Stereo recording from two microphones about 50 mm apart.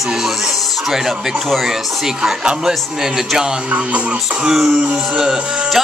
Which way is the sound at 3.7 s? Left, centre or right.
Right.